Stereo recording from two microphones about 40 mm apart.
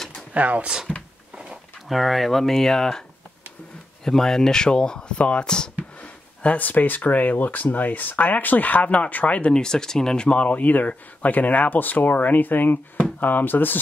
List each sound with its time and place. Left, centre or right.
0.3 s speech: right
1.9 s speech: centre
4.0 s speech: centre
5.9 s speech: left
9.5 s speech: centre; by 13.7 s left